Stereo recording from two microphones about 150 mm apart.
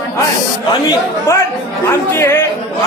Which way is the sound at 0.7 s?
25° left (ahead or behind).